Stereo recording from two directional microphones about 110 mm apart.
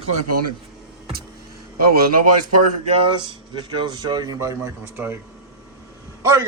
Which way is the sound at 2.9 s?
45° right (ahead or behind).